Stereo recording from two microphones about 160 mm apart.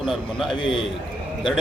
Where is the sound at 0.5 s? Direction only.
30° left (ahead or behind).